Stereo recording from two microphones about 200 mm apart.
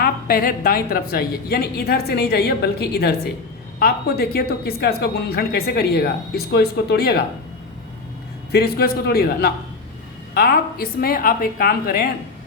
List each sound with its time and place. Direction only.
0.0 s a woman's voice: 50° left (ahead or behind)
8.5 s a woman's voice: 50° left (ahead or behind)